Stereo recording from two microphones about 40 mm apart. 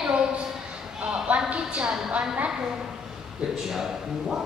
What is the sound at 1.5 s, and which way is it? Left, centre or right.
A woman's voice, right.